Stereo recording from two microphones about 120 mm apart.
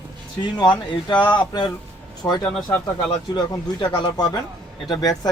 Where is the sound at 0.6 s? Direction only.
40° left (ahead or behind).